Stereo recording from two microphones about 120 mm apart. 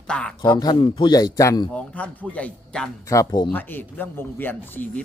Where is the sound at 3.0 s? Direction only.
25° left (ahead or behind).